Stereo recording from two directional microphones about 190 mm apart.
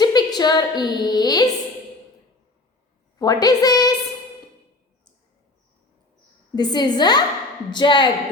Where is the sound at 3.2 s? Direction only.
20° left (ahead or behind).